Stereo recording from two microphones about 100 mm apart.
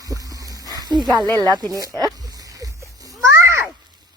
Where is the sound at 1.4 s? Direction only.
35° right (ahead or behind).